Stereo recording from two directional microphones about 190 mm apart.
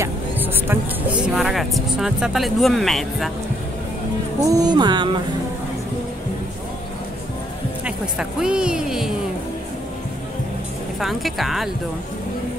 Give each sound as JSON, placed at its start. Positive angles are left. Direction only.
{"t": 0.0, "sound": "music", "side_deg": -10}
{"t": 1.2, "sound": "speech", "side_deg": 0}
{"t": 4.5, "sound": "speech", "side_deg": -20}
{"t": 7.8, "sound": "speech", "side_deg": -5}
{"t": 11.0, "sound": "speech", "side_deg": 0}